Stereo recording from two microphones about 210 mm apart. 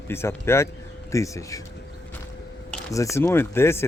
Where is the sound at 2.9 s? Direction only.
15° left (ahead or behind).